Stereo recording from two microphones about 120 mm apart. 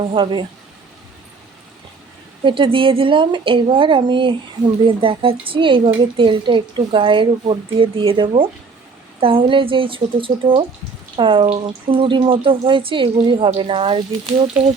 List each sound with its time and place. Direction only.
0.0 s a woman's voice: 50° right (ahead or behind)
2.4 s a woman's voice: 45° right (ahead or behind)